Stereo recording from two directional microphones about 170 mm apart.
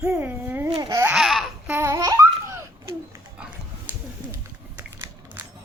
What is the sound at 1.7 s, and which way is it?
Babbling, 15° right (ahead or behind).